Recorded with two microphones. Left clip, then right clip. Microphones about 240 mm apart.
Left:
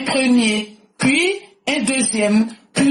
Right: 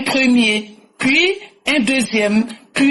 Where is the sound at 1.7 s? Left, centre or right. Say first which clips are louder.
Right 3 dB; right.